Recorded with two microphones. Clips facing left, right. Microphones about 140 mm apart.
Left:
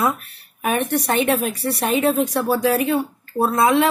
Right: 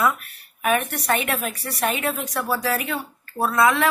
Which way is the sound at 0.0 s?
30° left (ahead or behind).